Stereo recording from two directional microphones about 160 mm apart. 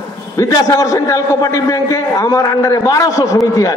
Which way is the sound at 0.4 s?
20° left (ahead or behind).